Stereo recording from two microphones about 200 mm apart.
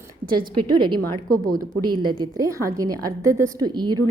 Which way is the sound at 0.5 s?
25° right (ahead or behind).